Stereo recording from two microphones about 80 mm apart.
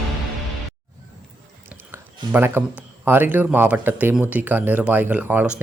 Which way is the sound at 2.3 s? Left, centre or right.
Right.